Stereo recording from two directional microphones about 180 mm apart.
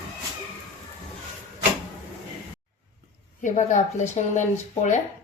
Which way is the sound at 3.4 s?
45° left (ahead or behind).